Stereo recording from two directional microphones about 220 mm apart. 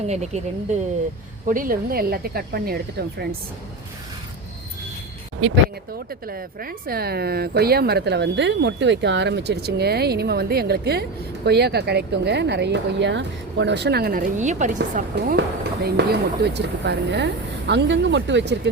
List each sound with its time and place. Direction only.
0.1 s speech: 30° right (ahead or behind)
6.1 s speech: 40° right (ahead or behind)
14.9 s speech: 45° right (ahead or behind)